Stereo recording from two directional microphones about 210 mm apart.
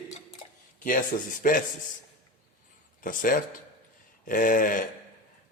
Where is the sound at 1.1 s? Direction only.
40° left (ahead or behind).